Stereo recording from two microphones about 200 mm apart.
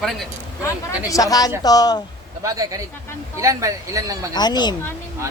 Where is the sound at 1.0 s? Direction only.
15° left (ahead or behind).